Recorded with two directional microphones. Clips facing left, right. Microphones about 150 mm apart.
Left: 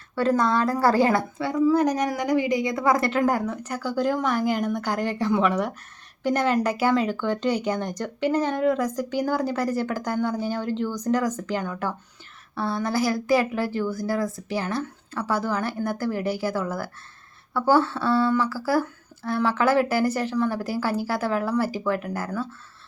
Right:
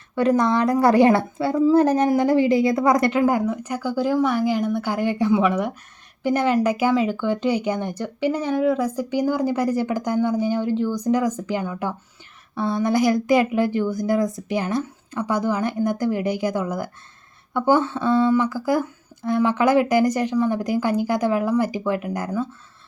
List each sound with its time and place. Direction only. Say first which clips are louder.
0.2 s a woman's voice: right 3 dB; 20° right (ahead or behind)
2.2 s a woman's voice: right 5 dB; 15° left (ahead or behind)
2.7 s a woman's voice: right 4 dB; 20° right (ahead or behind)
3.2 s a woman's voice: right 3 dB; 10° right (ahead or behind)